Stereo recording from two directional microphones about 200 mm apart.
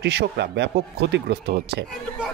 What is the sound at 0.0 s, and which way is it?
Speech, 55° right (ahead or behind).